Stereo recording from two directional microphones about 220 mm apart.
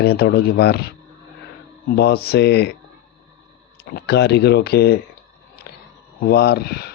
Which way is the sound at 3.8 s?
45° left (ahead or behind).